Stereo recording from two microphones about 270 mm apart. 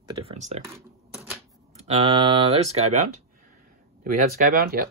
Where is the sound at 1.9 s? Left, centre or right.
Right.